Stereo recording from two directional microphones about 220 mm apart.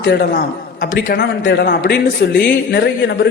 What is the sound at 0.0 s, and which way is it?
A man's voice, 50° left (ahead or behind).